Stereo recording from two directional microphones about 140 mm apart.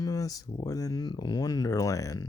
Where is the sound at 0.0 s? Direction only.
25° left (ahead or behind).